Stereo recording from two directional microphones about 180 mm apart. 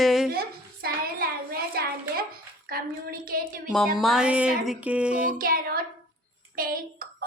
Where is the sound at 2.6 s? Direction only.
55° right (ahead or behind).